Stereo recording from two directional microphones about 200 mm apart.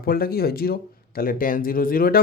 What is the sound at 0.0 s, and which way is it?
A man's voice, 50° left (ahead or behind).